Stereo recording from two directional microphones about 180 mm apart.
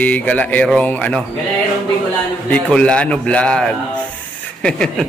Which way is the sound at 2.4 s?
5° left (ahead or behind).